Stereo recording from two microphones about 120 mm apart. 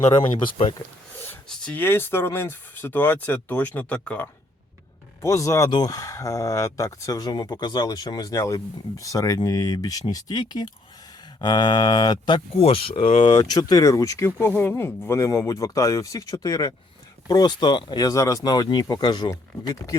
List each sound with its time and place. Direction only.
0.2 s speech: 50° left (ahead or behind)
1.5 s speech: 10° left (ahead or behind)
5.2 s speech: 25° left (ahead or behind)
12.5 s speech: 55° left (ahead or behind)
13.4 s speech: 35° left (ahead or behind)